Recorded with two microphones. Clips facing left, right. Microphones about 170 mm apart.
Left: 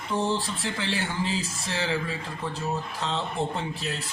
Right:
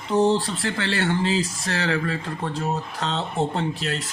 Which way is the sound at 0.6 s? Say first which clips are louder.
Right 5 dB; 70° right (ahead or behind).